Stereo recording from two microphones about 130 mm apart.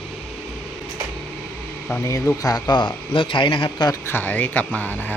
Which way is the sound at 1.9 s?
20° left (ahead or behind).